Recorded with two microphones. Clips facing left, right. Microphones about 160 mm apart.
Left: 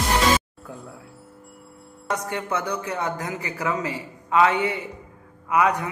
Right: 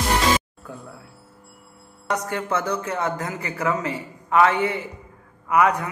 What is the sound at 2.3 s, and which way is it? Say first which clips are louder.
A man's voice: right 2 dB; 20° left (ahead or behind).